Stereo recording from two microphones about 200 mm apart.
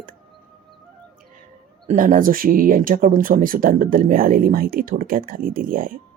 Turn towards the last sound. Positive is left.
turn(degrees=-45)  # may be behind; listen again after turning